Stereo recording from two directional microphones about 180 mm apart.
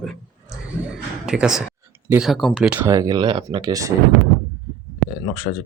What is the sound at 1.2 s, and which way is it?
Speech, 5° right (ahead or behind).